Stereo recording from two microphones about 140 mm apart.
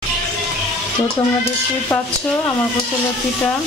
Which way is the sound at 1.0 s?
15° left (ahead or behind).